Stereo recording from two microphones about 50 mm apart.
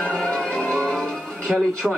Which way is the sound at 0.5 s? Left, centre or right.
Centre.